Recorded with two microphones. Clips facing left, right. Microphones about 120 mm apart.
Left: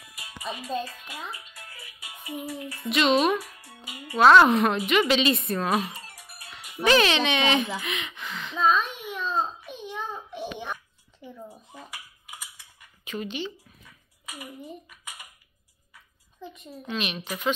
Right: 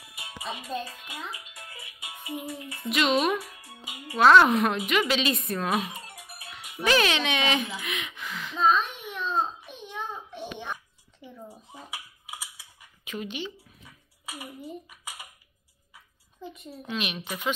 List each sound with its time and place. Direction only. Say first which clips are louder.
0.1 s music: right 1 dB; 25° right (ahead or behind)
0.5 s music: left 3 dB; 10° right (ahead or behind)
2.8 s speech: left 2 dB; 5° right (ahead or behind)
3.6 s music: even; 15° right (ahead or behind)
4.2 s speech: left 2 dB; centre (ahead or behind)
5.9 s music: right 2 dB; 20° right (ahead or behind)
6.5 s speech: left 3 dB; 5° right (ahead or behind)
7.8 s a sound: left 1 dB; 5° right (ahead or behind)
9.0 s babbling: even; 5° left (ahead or behind)
9.8 s child singing: left 1 dB; 10° left (ahead or behind)
11.1 s a sound: left 2 dB; centre (ahead or behind)
13.0 s speech: left 2 dB; 10° right (ahead or behind)
14.6 s speech: right 1 dB; 5° right (ahead or behind)